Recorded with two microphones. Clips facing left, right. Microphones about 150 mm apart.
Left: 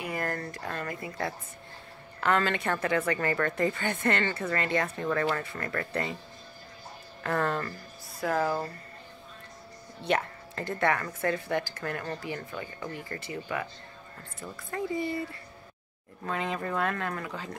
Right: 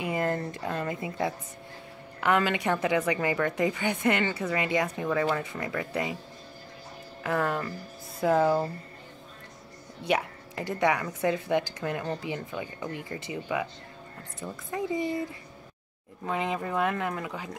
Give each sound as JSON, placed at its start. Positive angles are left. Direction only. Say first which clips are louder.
{"t": 0.0, "sound": "speech", "louder": "right 4 dB", "side_deg": -20}
{"t": 7.2, "sound": "speech", "louder": "right 1 dB", "side_deg": -10}
{"t": 8.2, "sound": "speech", "louder": "right 5 dB", "side_deg": -20}
{"t": 10.0, "sound": "speech", "louder": "right 1 dB", "side_deg": -10}
{"t": 16.3, "sound": "speech", "louder": "right 2 dB", "side_deg": -15}